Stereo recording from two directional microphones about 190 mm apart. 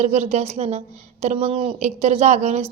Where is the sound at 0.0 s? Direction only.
35° right (ahead or behind).